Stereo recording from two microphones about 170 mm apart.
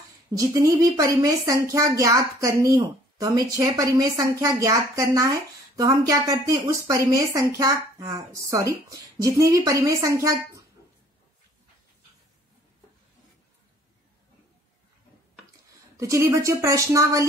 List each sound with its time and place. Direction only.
0.4 s speech: 20° right (ahead or behind)
16.0 s a woman's voice: 15° right (ahead or behind)